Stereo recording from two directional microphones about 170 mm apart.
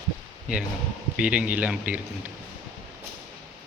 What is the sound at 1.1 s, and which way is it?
Speech, 5° right (ahead or behind).